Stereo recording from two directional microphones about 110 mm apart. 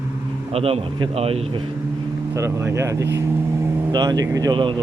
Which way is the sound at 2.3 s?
25° right (ahead or behind).